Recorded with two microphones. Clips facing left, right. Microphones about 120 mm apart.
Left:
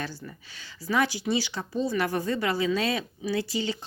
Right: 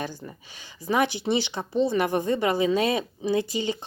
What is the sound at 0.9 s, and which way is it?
Speech, 20° right (ahead or behind).